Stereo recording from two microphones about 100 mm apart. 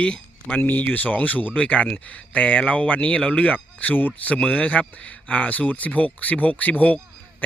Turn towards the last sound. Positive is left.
turn(degrees=15)  # may be behind; listen again after turning